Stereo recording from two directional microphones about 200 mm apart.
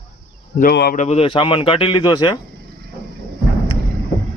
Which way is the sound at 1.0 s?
30° left (ahead or behind).